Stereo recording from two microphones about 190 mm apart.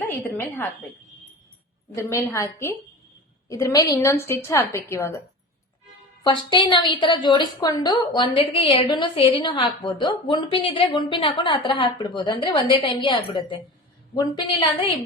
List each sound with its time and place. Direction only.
0.0 s a woman's voice: 10° left (ahead or behind)
2.0 s a woman's voice: 15° left (ahead or behind)
6.2 s a woman's voice: 25° left (ahead or behind)